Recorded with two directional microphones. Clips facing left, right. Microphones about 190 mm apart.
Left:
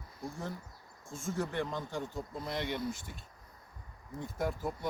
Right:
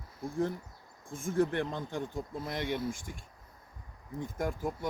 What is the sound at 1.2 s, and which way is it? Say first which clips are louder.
Speech: right 5 dB; 55° right (ahead or behind).